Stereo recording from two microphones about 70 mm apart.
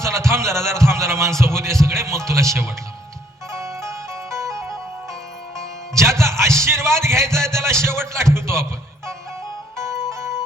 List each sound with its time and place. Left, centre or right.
0.0 s music: right
6.0 s a sound: right
7.4 s speech: right
9.7 s music: right